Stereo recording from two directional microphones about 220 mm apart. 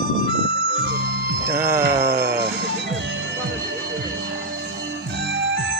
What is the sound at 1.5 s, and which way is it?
Speech, 10° right (ahead or behind).